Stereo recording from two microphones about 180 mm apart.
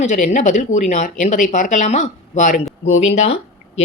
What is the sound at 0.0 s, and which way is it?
Speech, 40° left (ahead or behind).